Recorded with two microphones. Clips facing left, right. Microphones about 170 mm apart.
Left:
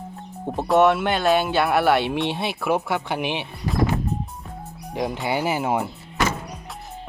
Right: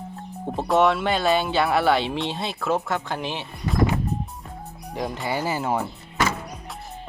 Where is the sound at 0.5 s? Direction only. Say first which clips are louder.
Left 2 dB; centre (ahead or behind).